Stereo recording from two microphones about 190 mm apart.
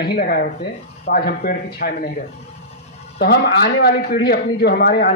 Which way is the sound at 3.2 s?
55° left (ahead or behind).